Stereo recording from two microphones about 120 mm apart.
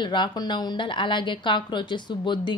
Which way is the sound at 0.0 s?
40° left (ahead or behind).